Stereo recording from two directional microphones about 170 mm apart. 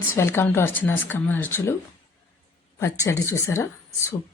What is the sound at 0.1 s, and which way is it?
A woman's voice, 15° left (ahead or behind).